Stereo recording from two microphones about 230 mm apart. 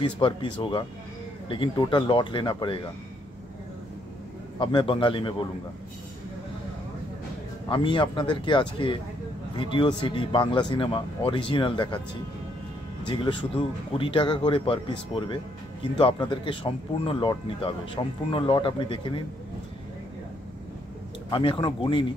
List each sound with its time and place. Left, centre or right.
0.0 s speech: left
4.6 s speech: left
7.7 s speech: left
13.0 s speech: left
21.3 s speech: left